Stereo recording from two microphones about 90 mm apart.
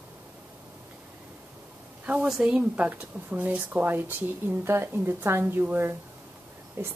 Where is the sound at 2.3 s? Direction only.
10° right (ahead or behind).